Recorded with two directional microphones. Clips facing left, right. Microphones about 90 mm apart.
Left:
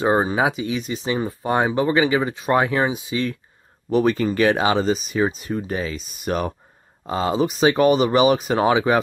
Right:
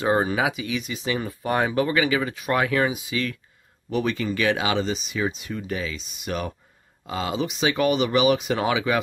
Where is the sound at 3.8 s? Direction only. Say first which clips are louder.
Left 6 dB; 40° left (ahead or behind).